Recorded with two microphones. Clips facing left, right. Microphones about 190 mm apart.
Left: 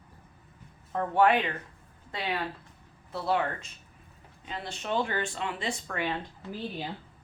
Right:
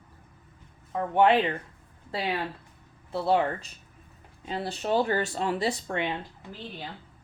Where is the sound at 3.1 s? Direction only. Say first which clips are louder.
Right 4 dB; 30° right (ahead or behind).